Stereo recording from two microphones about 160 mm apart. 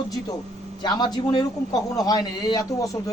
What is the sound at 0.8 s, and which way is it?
A man's voice, 25° left (ahead or behind).